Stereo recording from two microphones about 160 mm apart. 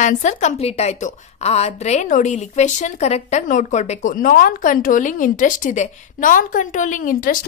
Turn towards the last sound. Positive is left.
turn(degrees=60)  # may be behind; listen again after turning